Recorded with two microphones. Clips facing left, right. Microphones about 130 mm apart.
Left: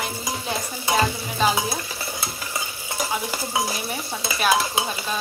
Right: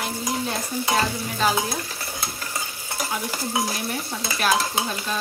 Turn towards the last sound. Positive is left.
turn(degrees=10)  # may be behind; listen again after turning